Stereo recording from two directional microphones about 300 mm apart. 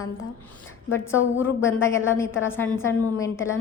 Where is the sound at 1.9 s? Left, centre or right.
Centre.